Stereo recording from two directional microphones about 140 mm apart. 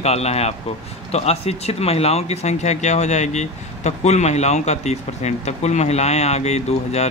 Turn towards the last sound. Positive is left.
turn(degrees=50)  # may be behind; listen again after turning